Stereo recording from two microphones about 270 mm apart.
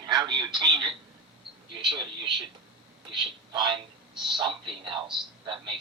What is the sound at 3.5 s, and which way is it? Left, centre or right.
A man's voice, centre.